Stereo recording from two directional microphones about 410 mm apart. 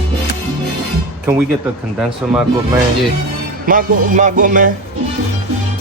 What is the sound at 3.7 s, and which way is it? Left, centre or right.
A man's voice, centre.